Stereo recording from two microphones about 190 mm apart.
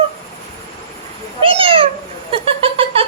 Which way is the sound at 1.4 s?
30° right (ahead or behind).